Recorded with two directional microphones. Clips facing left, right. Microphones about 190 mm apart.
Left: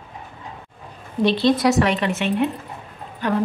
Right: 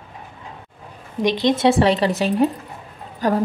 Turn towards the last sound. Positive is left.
turn(degrees=-40)  # may be behind; listen again after turning